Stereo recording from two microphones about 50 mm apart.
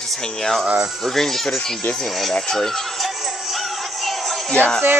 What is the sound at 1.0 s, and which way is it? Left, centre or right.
A woman's voice, centre.